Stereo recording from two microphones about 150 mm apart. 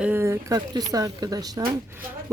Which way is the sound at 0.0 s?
15° right (ahead or behind).